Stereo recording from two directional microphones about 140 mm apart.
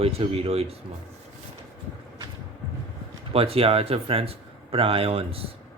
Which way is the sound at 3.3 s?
45° right (ahead or behind).